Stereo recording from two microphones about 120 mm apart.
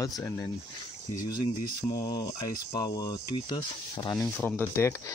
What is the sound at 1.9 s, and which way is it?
Speech, 30° left (ahead or behind).